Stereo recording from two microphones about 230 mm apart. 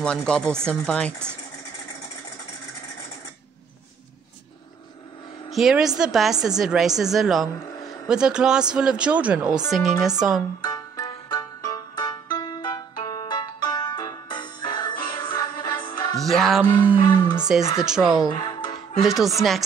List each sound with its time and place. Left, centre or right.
0.0 s speech: centre
5.5 s speech: centre
10.6 s music: centre
16.2 s music: centre
17.0 s a sound: centre
17.7 s speech: centre
18.2 s music: centre
18.9 s speech: centre